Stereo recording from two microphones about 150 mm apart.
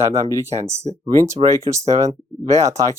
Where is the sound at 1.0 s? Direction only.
30° right (ahead or behind).